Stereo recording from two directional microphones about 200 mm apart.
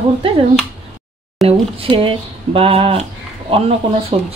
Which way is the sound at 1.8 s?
25° right (ahead or behind).